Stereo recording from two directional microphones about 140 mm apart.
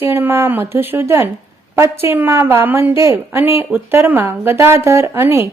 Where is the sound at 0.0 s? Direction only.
15° right (ahead or behind).